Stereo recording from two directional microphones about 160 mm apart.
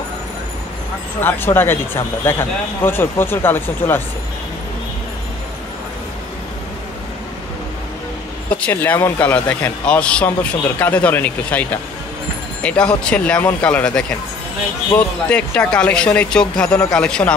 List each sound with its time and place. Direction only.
1.2 s speech: 15° left (ahead or behind)
8.5 s speech: 10° left (ahead or behind)